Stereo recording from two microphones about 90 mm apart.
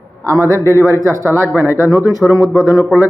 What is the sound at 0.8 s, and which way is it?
A man's voice, 30° right (ahead or behind).